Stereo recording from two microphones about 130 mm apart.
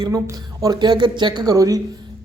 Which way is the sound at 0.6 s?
30° right (ahead or behind).